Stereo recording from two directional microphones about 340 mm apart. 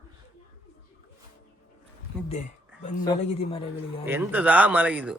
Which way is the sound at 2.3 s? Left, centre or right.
Left.